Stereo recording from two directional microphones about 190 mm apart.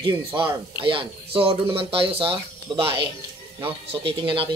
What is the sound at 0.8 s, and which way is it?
Speech, 25° right (ahead or behind).